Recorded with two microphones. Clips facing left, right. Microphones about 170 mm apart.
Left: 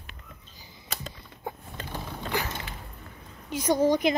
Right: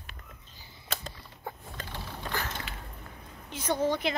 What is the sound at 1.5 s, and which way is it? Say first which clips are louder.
Mechanisms: left 4 dB; 20° left (ahead or behind).